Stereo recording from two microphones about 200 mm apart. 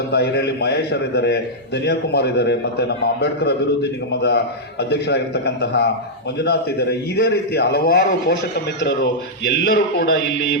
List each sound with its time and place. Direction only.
0.1 s a man's voice: 55° left (ahead or behind)
4.1 s a man's voice: 55° left (ahead or behind)